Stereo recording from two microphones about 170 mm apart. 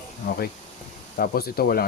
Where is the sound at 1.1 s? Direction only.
60° left (ahead or behind).